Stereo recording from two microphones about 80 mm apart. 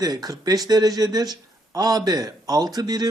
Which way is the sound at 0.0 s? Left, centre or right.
Right.